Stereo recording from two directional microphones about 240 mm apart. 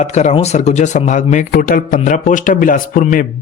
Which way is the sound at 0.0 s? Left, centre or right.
Left.